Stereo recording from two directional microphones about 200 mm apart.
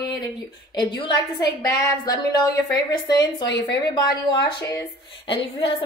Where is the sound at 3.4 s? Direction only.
60° left (ahead or behind).